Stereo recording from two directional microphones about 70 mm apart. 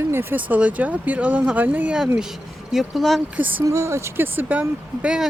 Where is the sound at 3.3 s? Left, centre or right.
Right.